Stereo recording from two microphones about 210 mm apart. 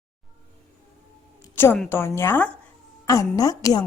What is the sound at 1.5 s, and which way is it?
A woman's voice, 10° left (ahead or behind).